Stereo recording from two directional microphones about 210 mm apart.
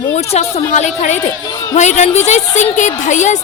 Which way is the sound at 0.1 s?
30° left (ahead or behind).